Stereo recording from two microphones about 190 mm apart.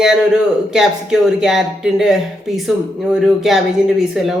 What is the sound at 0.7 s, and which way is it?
A woman's voice, 5° right (ahead or behind).